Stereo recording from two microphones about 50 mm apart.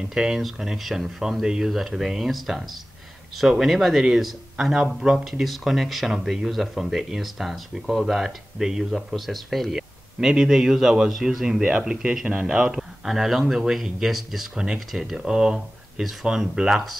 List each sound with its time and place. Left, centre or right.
0.1 s speech: centre
10.3 s speech: centre
13.0 s speech: centre
15.1 s speech: centre
16.0 s speech: centre